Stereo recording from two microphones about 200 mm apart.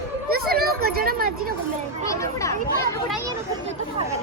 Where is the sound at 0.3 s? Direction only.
50° right (ahead or behind).